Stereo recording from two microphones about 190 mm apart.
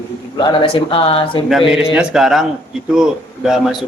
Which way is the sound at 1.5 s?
Centre (ahead or behind).